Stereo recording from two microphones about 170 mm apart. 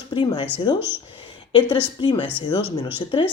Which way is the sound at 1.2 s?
30° left (ahead or behind).